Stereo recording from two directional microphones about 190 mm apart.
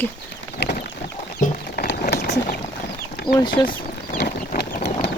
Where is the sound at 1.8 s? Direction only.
55° left (ahead or behind).